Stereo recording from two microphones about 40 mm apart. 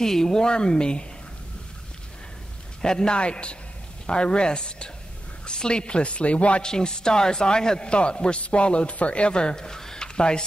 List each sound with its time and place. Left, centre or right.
0.0 s a man's voice: centre
2.8 s a man's voice: centre
6.6 s a man's voice: centre